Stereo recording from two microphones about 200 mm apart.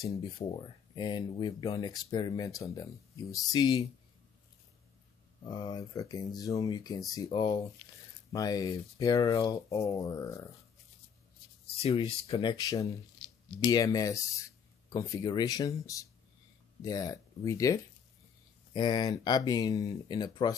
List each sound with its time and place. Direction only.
0.2 s speech: 25° left (ahead or behind)
5.4 s speech: 20° left (ahead or behind)
11.7 s speech: 30° left (ahead or behind)